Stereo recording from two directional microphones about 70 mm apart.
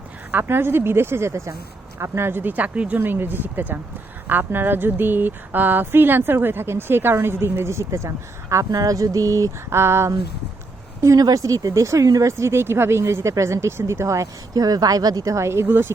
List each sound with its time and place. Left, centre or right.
0.3 s speech: right
3.0 s speech: right
11.0 s speech: right
12.4 s speech: right
14.5 s speech: right